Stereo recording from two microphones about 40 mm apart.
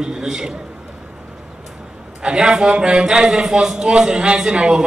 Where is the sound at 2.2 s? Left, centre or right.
Centre.